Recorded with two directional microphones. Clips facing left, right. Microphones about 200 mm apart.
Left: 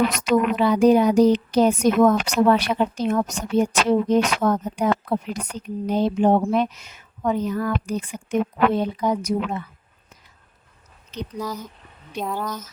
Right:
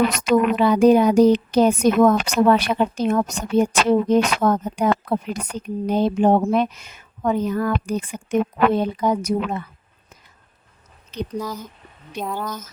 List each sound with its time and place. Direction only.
0.3 s a woman's voice: 55° right (ahead or behind)
11.3 s speech: centre (ahead or behind)